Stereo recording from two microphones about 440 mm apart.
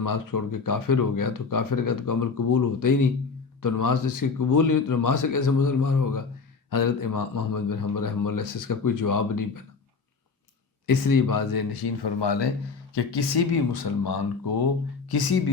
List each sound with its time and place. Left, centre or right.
0.0 s speech: left
10.8 s speech: left